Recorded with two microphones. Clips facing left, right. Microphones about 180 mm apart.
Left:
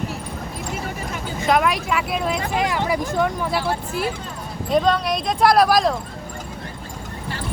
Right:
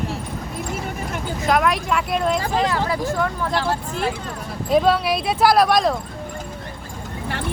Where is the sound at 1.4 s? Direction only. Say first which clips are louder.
Even; centre (ahead or behind).